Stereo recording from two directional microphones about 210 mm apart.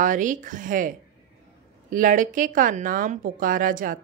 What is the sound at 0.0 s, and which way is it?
A woman's voice, 40° right (ahead or behind).